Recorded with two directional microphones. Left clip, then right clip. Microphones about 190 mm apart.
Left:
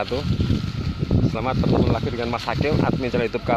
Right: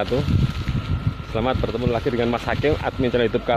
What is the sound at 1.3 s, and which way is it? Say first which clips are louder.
Speech: right 2 dB; 15° left (ahead or behind).